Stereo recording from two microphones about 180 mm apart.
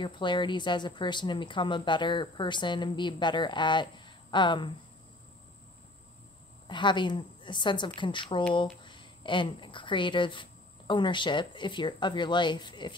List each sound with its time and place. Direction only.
0.0 s speech: 25° left (ahead or behind)
6.7 s speech: 25° left (ahead or behind)